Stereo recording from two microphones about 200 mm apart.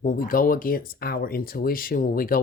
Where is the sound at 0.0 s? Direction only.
40° left (ahead or behind).